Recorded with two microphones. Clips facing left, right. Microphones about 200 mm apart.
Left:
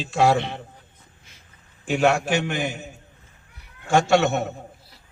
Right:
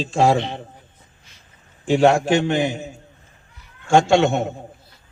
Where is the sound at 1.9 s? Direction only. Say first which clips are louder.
Right 5 dB; 25° right (ahead or behind).